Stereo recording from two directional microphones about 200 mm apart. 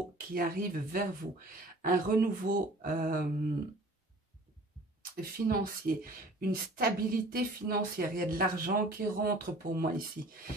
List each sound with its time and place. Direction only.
0.3 s speech: 45° right (ahead or behind)
5.0 s speech: 45° right (ahead or behind)